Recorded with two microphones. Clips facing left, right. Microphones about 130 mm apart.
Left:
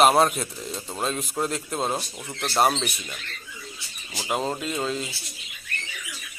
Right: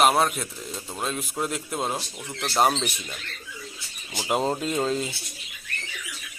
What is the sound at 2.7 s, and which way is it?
Speech, 10° right (ahead or behind).